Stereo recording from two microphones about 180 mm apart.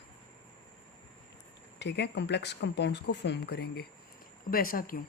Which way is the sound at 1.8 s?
75° left (ahead or behind).